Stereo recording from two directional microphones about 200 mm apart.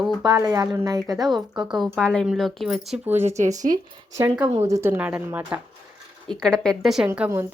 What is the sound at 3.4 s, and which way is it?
Speech, 35° right (ahead or behind).